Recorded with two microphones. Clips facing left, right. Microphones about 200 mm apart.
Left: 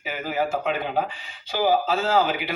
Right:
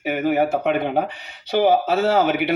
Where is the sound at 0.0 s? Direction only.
65° right (ahead or behind).